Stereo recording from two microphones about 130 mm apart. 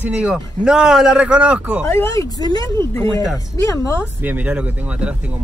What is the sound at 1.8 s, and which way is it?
Speech, 20° left (ahead or behind).